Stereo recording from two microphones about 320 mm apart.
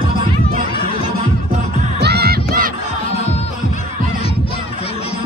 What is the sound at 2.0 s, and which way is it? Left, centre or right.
Music, right.